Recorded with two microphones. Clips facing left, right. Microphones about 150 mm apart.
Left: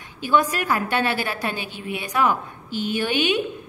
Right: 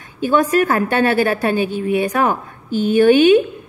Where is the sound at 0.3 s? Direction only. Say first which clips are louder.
Right 6 dB; 45° right (ahead or behind).